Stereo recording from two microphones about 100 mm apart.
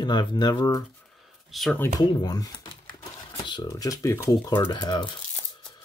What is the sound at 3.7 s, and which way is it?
Speech, 35° left (ahead or behind).